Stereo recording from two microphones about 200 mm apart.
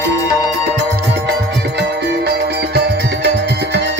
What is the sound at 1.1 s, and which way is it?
Music, 60° right (ahead or behind).